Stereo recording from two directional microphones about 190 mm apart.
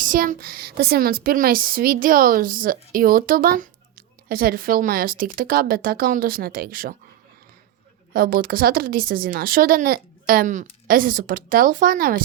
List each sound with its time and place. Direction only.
0.0 s a woman's voice: 45° right (ahead or behind)
8.1 s a woman's voice: 50° right (ahead or behind)